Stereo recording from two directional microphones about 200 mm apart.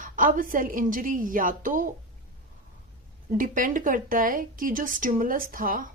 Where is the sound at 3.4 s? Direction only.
45° right (ahead or behind).